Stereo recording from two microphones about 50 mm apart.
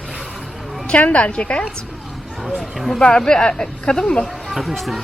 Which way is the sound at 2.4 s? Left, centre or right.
Centre.